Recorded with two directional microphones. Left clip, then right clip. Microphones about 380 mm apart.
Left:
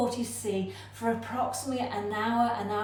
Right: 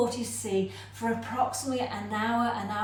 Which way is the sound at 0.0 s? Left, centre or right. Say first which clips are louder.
Right 1 dB; centre.